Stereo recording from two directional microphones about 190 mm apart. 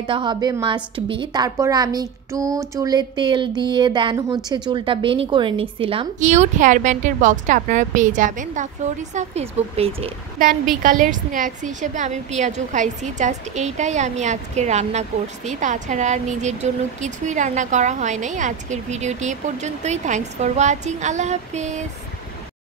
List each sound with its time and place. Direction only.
0.0 s a woman's voice: 25° right (ahead or behind)
10.4 s a woman's voice: 45° right (ahead or behind)